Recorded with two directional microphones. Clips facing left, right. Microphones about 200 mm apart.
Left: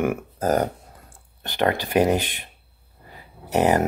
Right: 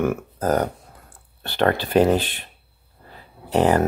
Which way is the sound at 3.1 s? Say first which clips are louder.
Right 2 dB; 10° left (ahead or behind).